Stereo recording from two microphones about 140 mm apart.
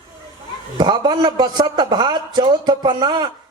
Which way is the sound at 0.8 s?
30° right (ahead or behind).